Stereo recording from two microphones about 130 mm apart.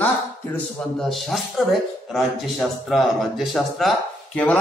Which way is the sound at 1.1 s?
Centre (ahead or behind).